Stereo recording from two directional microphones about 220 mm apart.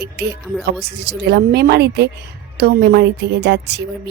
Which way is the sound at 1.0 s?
50° right (ahead or behind).